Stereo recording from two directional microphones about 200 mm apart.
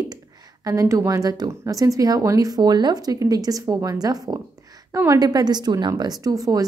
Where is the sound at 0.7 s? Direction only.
15° right (ahead or behind).